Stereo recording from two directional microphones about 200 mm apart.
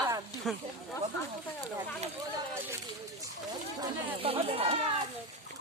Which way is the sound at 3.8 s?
30° right (ahead or behind).